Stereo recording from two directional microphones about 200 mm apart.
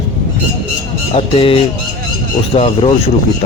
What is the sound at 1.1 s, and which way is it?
Speech, 30° left (ahead or behind).